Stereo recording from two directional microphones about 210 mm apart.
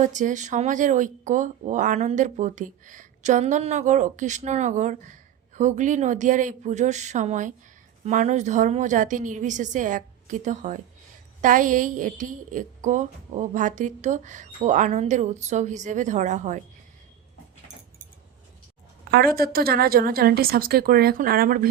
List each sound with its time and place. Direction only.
0.0 s a woman's voice: 35° right (ahead or behind)
19.1 s a woman's voice: 45° right (ahead or behind)